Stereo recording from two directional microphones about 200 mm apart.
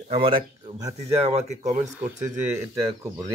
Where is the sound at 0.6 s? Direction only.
30° right (ahead or behind).